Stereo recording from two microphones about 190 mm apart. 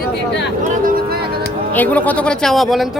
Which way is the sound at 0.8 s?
50° right (ahead or behind).